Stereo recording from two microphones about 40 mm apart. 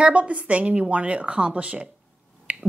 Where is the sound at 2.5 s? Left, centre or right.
Right.